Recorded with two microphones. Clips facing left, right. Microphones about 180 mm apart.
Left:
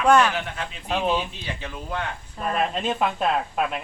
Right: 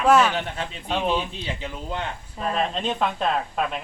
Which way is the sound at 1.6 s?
20° right (ahead or behind).